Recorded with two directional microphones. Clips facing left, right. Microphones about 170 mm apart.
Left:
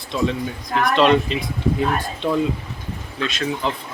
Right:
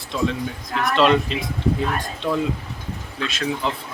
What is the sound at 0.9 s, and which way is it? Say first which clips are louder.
Speech: left 1 dB; centre (ahead or behind).